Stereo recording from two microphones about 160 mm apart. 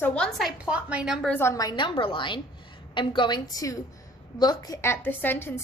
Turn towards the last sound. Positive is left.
turn(degrees=15)  # may be behind; listen again after turning